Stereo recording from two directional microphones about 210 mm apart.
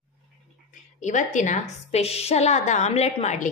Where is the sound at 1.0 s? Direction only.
35° left (ahead or behind).